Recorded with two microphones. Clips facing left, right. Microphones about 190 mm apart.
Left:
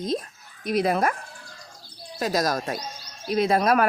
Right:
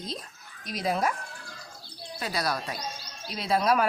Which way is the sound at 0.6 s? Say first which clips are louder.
Left 6 dB; 60° left (ahead or behind).